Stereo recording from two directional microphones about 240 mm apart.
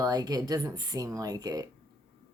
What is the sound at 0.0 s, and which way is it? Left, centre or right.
Speech, centre.